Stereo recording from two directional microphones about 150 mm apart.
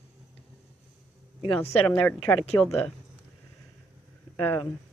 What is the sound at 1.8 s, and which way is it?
Speech, 10° left (ahead or behind).